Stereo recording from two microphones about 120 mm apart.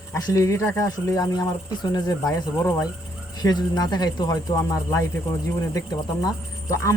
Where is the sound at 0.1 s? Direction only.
25° left (ahead or behind).